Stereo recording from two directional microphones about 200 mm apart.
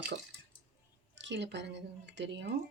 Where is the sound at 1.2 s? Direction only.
60° right (ahead or behind).